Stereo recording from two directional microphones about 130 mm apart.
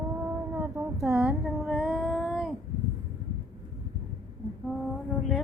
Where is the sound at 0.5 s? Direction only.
20° right (ahead or behind).